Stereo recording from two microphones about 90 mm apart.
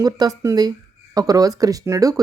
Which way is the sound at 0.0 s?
45° right (ahead or behind).